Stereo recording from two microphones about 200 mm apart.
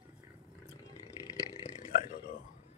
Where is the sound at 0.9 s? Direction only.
15° left (ahead or behind).